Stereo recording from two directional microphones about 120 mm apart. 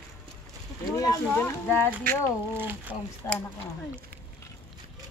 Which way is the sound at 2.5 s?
15° right (ahead or behind).